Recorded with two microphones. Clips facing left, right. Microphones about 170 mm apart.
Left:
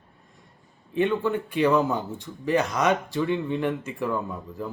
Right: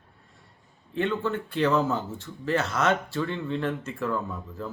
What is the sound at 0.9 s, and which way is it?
Speech, 15° left (ahead or behind).